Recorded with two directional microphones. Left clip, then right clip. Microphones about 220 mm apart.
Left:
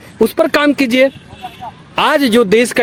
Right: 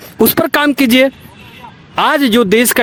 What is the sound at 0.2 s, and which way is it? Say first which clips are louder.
Speech: even; 50° right (ahead or behind).